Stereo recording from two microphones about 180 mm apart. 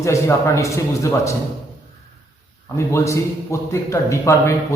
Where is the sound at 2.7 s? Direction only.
15° left (ahead or behind).